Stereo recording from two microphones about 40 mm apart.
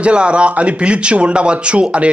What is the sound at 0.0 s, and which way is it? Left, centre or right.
Speech, right.